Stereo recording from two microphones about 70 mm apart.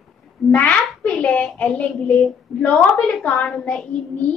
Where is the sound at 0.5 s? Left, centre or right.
Centre.